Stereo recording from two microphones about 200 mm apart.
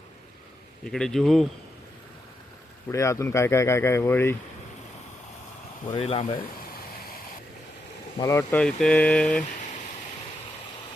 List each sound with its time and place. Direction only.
0.9 s speech: 5° left (ahead or behind)
2.9 s speech: 15° left (ahead or behind)
5.9 s speech: 30° left (ahead or behind)
8.2 s speech: 15° left (ahead or behind)